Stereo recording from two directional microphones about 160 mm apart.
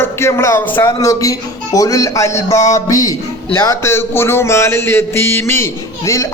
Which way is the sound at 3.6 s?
15° left (ahead or behind).